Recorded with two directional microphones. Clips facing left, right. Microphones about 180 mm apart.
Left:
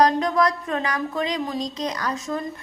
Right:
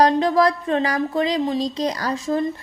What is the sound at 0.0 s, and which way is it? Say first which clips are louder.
A woman's voice: right 3 dB; 30° right (ahead or behind).